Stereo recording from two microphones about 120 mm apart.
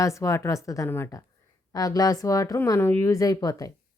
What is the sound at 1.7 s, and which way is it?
A woman's voice, 30° left (ahead or behind).